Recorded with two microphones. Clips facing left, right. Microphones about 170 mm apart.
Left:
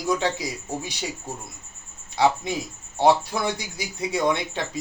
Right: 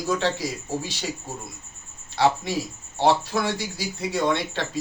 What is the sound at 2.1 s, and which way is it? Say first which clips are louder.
Speech: even; 15° left (ahead or behind).